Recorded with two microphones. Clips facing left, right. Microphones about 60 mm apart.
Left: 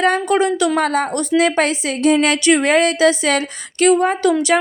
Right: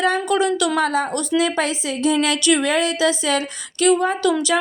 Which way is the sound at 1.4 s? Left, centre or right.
Left.